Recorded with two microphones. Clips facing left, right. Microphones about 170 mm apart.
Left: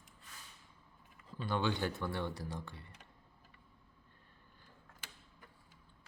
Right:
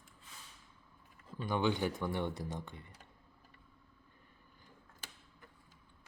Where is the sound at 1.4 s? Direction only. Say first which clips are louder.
Right 2 dB; 15° right (ahead or behind).